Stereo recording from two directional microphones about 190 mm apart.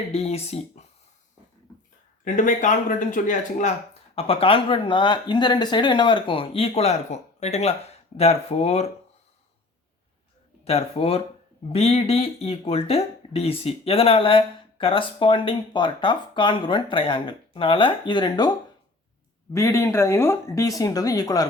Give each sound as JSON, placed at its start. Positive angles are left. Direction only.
{"t": 0.1, "sound": "speech", "side_deg": 35}
{"t": 2.2, "sound": "speech", "side_deg": 40}
{"t": 4.1, "sound": "speech", "side_deg": 30}
{"t": 10.6, "sound": "speech", "side_deg": 35}
{"t": 19.5, "sound": "speech", "side_deg": 15}